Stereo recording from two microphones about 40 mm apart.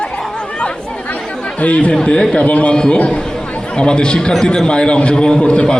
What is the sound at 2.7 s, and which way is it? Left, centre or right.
A woman's voice, left.